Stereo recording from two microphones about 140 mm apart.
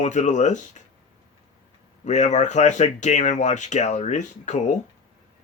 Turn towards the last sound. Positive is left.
turn(degrees=60)  # may be behind; listen again after turning